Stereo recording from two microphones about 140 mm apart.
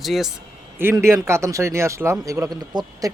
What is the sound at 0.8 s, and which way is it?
A man's voice, 20° right (ahead or behind).